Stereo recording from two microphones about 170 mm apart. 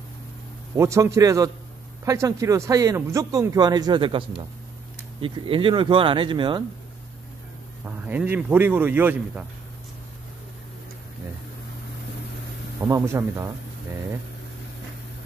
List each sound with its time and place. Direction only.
0.7 s speech: 15° right (ahead or behind)
5.2 s speech: 30° right (ahead or behind)
7.8 s speech: 10° right (ahead or behind)
12.8 s speech: 15° right (ahead or behind)